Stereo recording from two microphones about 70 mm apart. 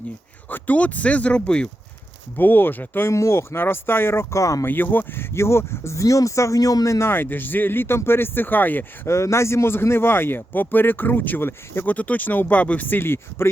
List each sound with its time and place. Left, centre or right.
0.5 s speech: left
2.3 s speech: left
3.1 s speech: left
4.6 s speech: left
7.1 s speech: left
9.0 s speech: left
11.9 s speech: left